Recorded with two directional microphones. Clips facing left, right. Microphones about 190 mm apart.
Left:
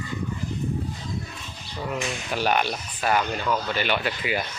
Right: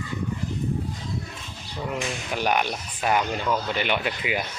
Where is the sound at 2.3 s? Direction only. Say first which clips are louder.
Left 1 dB; 15° right (ahead or behind).